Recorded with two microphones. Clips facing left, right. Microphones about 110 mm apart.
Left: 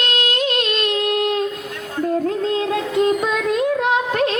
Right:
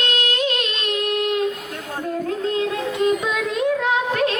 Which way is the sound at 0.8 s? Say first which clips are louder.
Even; 40° left (ahead or behind).